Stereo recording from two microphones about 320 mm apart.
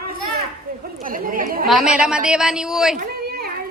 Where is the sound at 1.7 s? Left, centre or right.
Centre.